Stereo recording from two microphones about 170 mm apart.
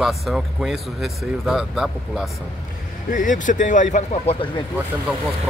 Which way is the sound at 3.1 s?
50° left (ahead or behind).